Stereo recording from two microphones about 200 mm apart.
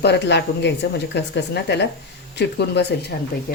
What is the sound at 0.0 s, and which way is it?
Speech, 55° left (ahead or behind).